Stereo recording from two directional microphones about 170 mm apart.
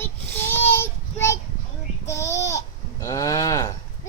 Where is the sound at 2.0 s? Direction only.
15° left (ahead or behind).